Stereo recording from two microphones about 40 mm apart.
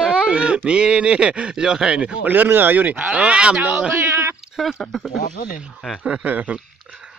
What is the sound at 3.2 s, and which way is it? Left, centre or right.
Speech, right.